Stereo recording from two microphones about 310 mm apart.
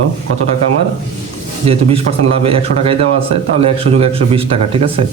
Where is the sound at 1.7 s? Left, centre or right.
Centre.